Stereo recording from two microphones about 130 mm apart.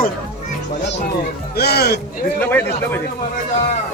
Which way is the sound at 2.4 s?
15° left (ahead or behind).